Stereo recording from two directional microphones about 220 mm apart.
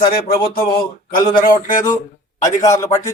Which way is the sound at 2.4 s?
15° left (ahead or behind).